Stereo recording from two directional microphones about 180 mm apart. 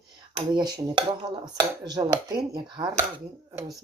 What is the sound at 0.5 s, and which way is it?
Speech, 25° right (ahead or behind).